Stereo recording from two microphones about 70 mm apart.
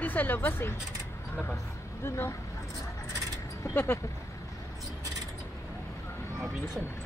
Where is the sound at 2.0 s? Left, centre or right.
Left.